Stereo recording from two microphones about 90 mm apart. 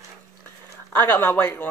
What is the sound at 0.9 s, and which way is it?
Speech, 20° left (ahead or behind).